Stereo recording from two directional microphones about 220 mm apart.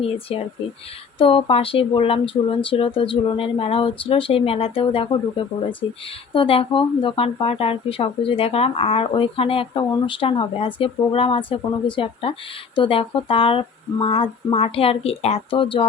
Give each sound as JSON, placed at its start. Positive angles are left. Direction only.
{"t": 0.0, "sound": "speech", "side_deg": 25}
{"t": 6.3, "sound": "speech", "side_deg": 25}